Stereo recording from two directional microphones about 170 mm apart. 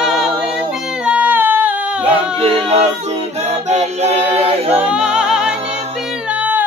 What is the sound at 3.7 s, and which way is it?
Choir, 40° right (ahead or behind).